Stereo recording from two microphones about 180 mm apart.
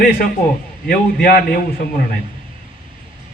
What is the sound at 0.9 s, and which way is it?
Speech, 55° left (ahead or behind).